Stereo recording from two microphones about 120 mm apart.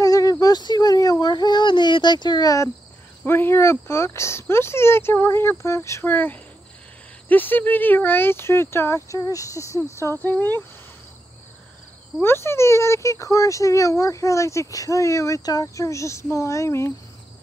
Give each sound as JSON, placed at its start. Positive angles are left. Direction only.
{"t": 0.0, "sound": "baby cry", "side_deg": 30}
{"t": 3.3, "sound": "speech", "side_deg": 20}
{"t": 12.2, "sound": "speech", "side_deg": 20}